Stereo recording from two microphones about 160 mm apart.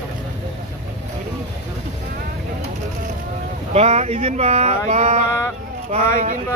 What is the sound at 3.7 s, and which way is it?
Speech, 40° right (ahead or behind).